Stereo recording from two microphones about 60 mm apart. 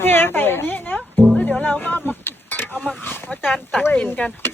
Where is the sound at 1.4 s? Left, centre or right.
Centre.